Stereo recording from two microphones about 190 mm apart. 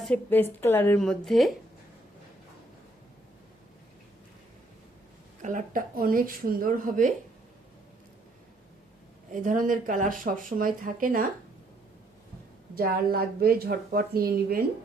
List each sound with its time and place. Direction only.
0.0 s a woman's voice: 10° left (ahead or behind)
5.4 s speech: 40° right (ahead or behind)
9.3 s speech: 45° right (ahead or behind)
12.7 s speech: 50° right (ahead or behind)